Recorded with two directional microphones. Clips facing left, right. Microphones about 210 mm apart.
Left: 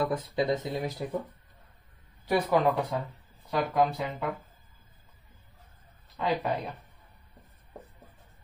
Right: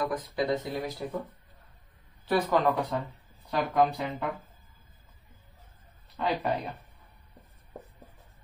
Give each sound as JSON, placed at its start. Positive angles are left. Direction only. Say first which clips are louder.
{"t": 0.0, "sound": "speech", "louder": "left 2 dB", "side_deg": 25}
{"t": 2.2, "sound": "speech", "louder": "even", "side_deg": 10}
{"t": 6.1, "sound": "speech", "louder": "even", "side_deg": 0}